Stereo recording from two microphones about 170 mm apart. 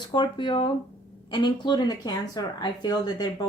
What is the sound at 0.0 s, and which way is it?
Speech, 25° left (ahead or behind).